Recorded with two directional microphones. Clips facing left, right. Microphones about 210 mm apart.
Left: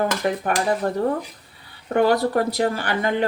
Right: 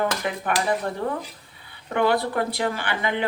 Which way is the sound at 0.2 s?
40° left (ahead or behind).